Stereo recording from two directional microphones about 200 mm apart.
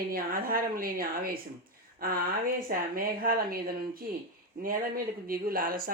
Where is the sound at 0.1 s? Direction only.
45° right (ahead or behind).